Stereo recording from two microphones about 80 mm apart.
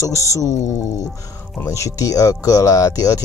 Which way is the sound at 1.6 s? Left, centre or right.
Left.